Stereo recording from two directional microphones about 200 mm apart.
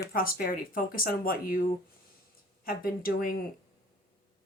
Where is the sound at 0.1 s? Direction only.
45° left (ahead or behind).